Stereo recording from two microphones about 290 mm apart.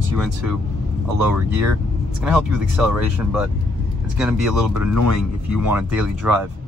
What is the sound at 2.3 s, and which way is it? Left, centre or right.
Speech, centre.